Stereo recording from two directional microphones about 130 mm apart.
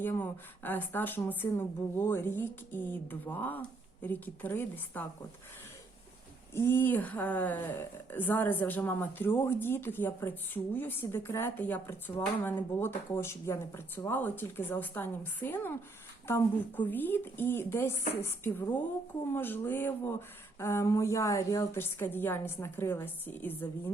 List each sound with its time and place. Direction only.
0.0 s speech: 15° left (ahead or behind)
6.5 s speech: 20° left (ahead or behind)